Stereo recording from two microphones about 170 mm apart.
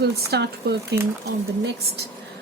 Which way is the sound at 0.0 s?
70° right (ahead or behind).